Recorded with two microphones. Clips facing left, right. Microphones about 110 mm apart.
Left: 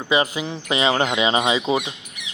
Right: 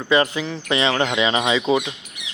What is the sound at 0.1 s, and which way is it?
Speech, 15° left (ahead or behind).